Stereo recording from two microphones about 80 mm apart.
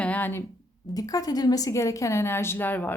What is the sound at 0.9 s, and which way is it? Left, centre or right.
A woman's voice, left.